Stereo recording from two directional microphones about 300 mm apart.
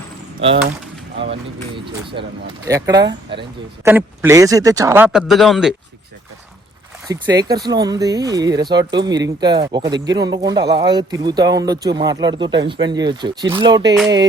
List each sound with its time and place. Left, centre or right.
1.2 s speech: centre
7.1 s speech: centre